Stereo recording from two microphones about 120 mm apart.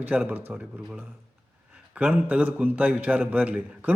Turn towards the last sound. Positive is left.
turn(degrees=-15)  # may be behind; listen again after turning